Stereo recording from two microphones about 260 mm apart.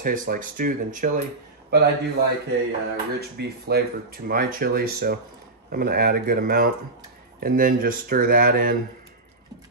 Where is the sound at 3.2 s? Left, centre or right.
Right.